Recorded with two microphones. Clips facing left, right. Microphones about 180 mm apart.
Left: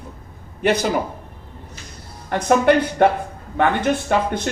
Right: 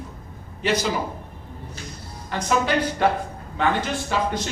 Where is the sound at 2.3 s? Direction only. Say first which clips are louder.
Left 7 dB; 60° left (ahead or behind).